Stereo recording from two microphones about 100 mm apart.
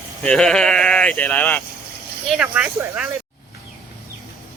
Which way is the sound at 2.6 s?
15° right (ahead or behind).